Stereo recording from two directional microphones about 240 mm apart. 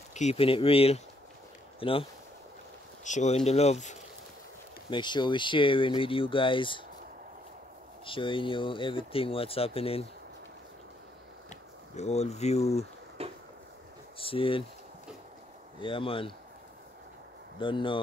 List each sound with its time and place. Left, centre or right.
0.1 s speech: left
8.0 s speech: left
11.9 s speech: left
13.2 s a sound: right
14.1 s speech: left
15.8 s speech: left
17.6 s speech: left